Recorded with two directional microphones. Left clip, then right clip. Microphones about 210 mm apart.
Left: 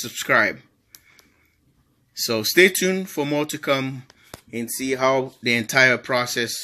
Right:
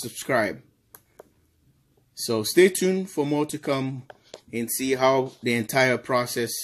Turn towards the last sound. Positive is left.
turn(degrees=-5)  # may be behind; listen again after turning